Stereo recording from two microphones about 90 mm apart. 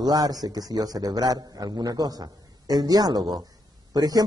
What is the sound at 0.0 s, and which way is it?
A man's voice, 45° right (ahead or behind).